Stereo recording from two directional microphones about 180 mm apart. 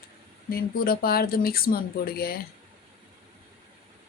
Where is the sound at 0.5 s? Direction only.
55° left (ahead or behind).